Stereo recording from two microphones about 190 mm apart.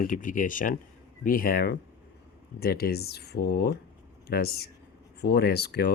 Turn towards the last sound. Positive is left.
turn(degrees=55)  # may be behind; listen again after turning